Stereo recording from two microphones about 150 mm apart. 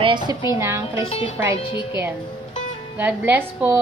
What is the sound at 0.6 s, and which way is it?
Speech, 15° right (ahead or behind).